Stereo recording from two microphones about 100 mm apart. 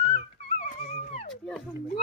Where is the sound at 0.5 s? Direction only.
90° left.